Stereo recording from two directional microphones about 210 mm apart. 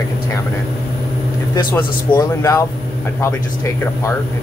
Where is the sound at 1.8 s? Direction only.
15° left (ahead or behind).